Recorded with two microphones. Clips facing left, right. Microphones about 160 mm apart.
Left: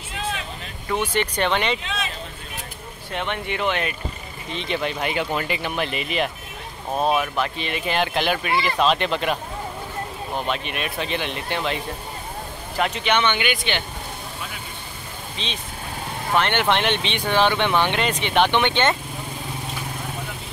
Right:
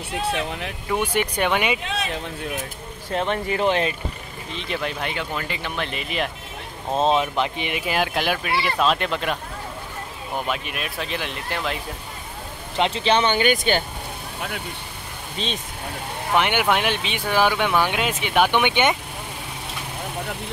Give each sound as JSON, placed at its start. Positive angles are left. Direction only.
{"t": 0.3, "sound": "speech", "side_deg": -65}
{"t": 0.8, "sound": "speech", "side_deg": -10}
{"t": 3.1, "sound": "speech", "side_deg": -35}
{"t": 4.5, "sound": "speech", "side_deg": 0}
{"t": 4.9, "sound": "speech", "side_deg": 15}
{"t": 5.9, "sound": "speech", "side_deg": 0}
{"t": 6.9, "sound": "speech", "side_deg": -20}
{"t": 7.8, "sound": "speech", "side_deg": -5}
{"t": 12.7, "sound": "speech", "side_deg": -25}
{"t": 15.3, "sound": "speech", "side_deg": -45}
{"t": 16.3, "sound": "speech", "side_deg": -10}